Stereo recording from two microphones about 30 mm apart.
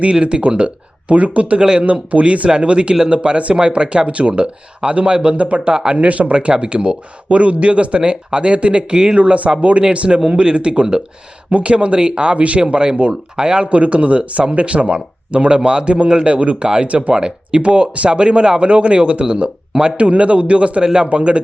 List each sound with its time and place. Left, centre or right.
0.0 s speech: right
2.5 s speech: right
5.7 s speech: right
6.0 s speech: right
6.3 s speech: right
9.1 s speech: right
12.6 s speech: right
13.7 s speech: right
16.2 s speech: right
17.1 s speech: right
20.8 s speech: right
21.1 s speech: right